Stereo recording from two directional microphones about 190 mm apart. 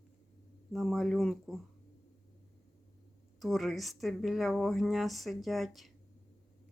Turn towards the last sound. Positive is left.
turn(degrees=0)  # may be behind; listen again after turning